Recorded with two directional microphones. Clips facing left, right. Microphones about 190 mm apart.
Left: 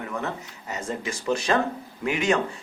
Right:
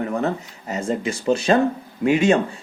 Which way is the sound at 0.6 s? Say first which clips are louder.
Right 7 dB; 30° right (ahead or behind).